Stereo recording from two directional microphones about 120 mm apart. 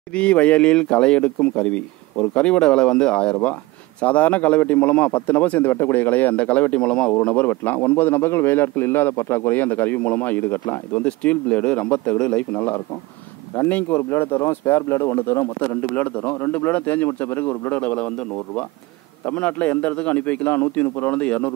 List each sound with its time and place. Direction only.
0.1 s speech: 10° left (ahead or behind)